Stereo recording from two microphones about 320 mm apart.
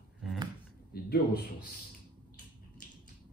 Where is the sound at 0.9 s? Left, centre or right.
Left.